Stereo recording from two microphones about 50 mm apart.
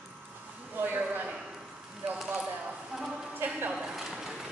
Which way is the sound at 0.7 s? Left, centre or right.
Right.